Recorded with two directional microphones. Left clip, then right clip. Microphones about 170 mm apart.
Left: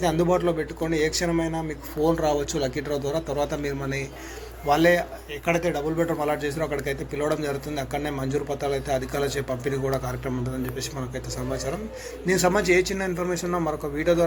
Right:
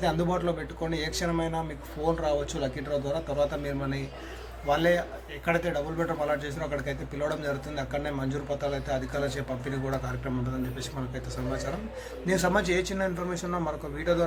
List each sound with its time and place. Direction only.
0.0 s a man's voice: 15° left (ahead or behind)
2.0 s speech: 25° left (ahead or behind)
12.2 s a man's voice: 15° left (ahead or behind)